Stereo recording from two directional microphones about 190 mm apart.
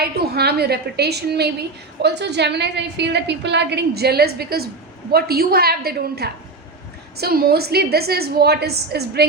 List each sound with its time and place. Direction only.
0.0 s a woman's voice: 55° right (ahead or behind)